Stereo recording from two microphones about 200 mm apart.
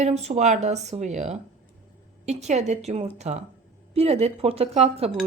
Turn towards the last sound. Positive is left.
turn(degrees=-30)  # may be behind; listen again after turning